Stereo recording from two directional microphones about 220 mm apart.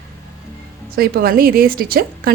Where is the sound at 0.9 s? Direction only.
45° right (ahead or behind).